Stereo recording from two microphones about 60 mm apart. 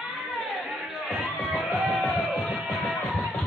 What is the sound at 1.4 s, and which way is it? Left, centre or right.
Music, centre.